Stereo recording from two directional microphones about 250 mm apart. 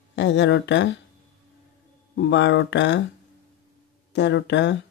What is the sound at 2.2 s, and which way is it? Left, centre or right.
Speech, left.